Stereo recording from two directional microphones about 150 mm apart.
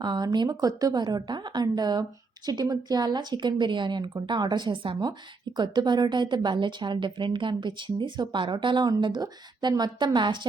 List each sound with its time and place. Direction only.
0.0 s a woman's voice: 30° right (ahead or behind)